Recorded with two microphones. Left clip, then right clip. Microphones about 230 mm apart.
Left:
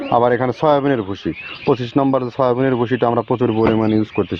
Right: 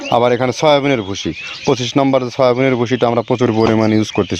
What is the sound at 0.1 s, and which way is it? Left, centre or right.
Speech, right.